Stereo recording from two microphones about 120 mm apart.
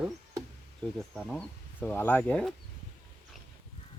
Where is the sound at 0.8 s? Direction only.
5° left (ahead or behind).